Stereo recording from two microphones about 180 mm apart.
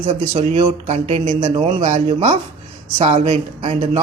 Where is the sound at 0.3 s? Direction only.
30° right (ahead or behind).